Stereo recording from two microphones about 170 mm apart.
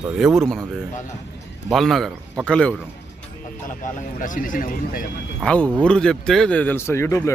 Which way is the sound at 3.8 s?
50° left (ahead or behind).